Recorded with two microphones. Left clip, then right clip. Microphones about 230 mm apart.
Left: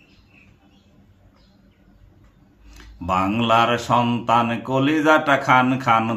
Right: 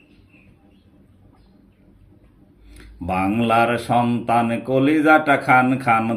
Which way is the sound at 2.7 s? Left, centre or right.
Left.